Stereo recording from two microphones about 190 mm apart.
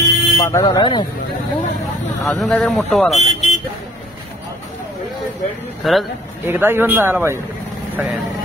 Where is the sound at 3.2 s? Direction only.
35° left (ahead or behind).